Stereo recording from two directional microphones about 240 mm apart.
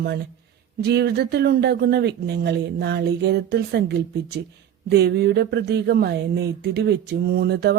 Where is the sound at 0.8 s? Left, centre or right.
Right.